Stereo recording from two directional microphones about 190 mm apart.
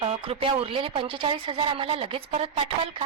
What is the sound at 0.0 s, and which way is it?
Speech, 30° right (ahead or behind).